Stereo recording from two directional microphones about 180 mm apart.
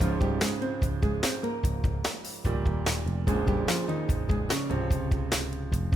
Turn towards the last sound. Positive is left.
turn(degrees=0)  # may be behind; listen again after turning